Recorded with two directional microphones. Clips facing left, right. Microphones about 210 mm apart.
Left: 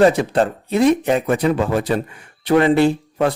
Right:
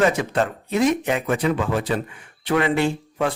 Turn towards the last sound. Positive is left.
turn(degrees=35)  # may be behind; listen again after turning